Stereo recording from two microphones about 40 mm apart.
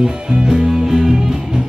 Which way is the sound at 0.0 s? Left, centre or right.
Centre.